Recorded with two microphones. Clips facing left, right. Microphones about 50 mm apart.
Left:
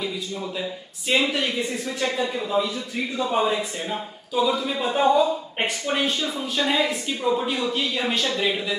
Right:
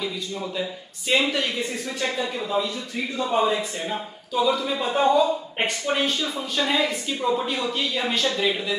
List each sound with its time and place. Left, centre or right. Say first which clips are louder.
0.0 s a man's voice: even; centre